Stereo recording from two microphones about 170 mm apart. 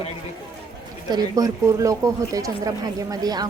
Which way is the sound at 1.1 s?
20° right (ahead or behind).